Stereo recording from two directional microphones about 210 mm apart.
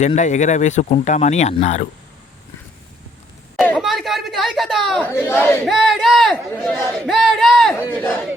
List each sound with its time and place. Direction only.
0.0 s speech: 35° left (ahead or behind)
3.6 s chatter: centre (ahead or behind)
5.6 s speech: centre (ahead or behind)
6.5 s a man's voice: 10° left (ahead or behind)